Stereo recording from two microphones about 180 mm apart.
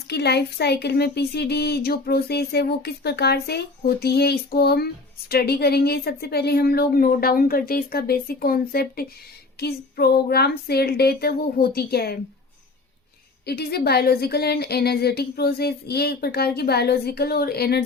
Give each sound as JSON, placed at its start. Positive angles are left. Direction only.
{"t": 0.1, "sound": "speech", "side_deg": 65}
{"t": 13.4, "sound": "speech", "side_deg": 65}